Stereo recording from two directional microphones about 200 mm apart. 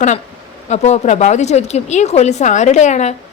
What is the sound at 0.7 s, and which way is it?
A woman's voice, 35° left (ahead or behind).